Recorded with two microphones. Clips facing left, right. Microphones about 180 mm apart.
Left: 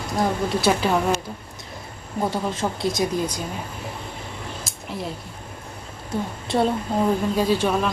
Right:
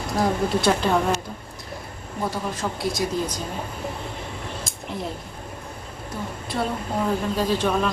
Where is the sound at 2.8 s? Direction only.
20° left (ahead or behind).